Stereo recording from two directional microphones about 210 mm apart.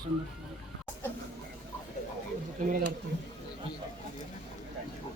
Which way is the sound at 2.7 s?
45° right (ahead or behind).